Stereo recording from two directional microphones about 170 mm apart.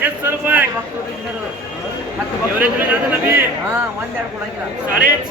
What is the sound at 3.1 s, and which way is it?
Speech, 10° right (ahead or behind).